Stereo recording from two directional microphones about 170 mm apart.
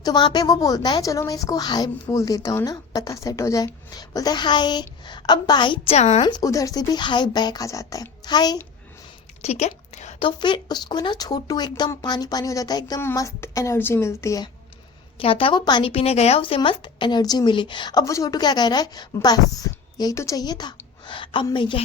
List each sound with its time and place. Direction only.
0.0 s a woman's voice: 25° left (ahead or behind)
6.2 s a woman's voice: 20° left (ahead or behind)
9.4 s a woman's voice: 40° left (ahead or behind)
10.2 s a woman's voice: 25° left (ahead or behind)
15.2 s a woman's voice: 35° left (ahead or behind)